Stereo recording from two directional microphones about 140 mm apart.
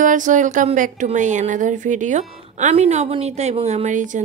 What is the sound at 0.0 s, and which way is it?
A woman's voice, 65° right (ahead or behind).